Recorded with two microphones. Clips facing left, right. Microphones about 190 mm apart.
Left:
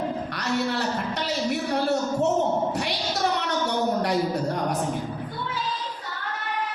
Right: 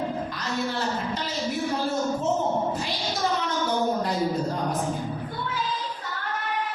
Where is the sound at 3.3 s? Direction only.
70° left (ahead or behind).